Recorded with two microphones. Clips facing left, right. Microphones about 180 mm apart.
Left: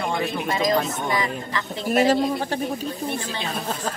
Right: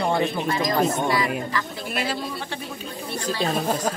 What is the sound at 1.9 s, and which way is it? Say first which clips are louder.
Speech: left 11 dB; 40° left (ahead or behind).